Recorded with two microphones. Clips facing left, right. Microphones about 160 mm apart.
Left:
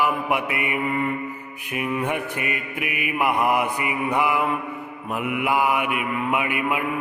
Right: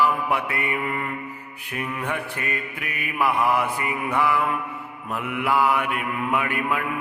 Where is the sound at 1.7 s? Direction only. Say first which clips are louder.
Left 4 dB; 15° left (ahead or behind).